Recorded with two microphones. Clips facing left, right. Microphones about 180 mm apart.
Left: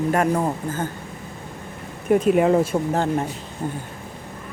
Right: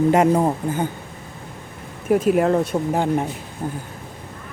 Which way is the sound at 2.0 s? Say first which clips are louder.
Even; centre (ahead or behind).